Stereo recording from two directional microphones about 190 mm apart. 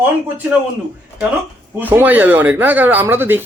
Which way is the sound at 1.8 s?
10° right (ahead or behind).